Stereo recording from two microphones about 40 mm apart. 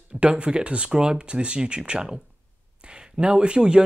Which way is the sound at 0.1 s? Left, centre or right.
Right.